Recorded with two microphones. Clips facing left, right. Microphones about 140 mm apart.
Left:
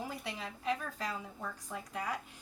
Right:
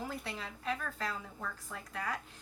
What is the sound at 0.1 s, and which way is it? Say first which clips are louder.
A woman's voice: even; 15° left (ahead or behind).